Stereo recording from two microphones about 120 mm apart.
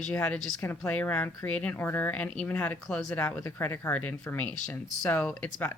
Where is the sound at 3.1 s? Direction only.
15° left (ahead or behind).